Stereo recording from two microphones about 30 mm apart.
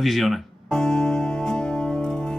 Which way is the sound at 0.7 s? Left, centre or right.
Left.